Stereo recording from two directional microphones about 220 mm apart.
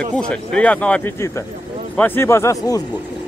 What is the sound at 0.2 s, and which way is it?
Speech, 5° left (ahead or behind).